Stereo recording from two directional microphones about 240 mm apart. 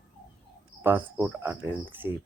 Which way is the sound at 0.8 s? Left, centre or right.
Centre.